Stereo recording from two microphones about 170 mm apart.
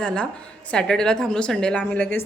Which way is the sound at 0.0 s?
5° left (ahead or behind).